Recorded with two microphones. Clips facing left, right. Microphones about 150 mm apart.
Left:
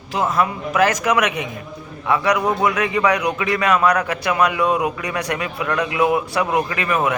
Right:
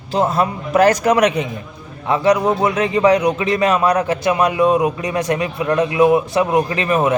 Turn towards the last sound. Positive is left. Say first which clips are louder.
# right 3 dB
turn(degrees=-25)  # may be behind; listen again after turning